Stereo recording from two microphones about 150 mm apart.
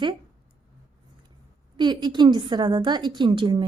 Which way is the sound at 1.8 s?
30° right (ahead or behind).